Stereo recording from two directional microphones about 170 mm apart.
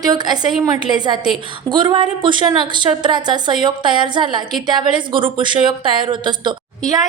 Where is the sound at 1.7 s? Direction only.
25° right (ahead or behind).